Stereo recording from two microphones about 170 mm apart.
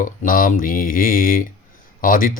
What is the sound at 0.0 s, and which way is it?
Speech, 50° left (ahead or behind).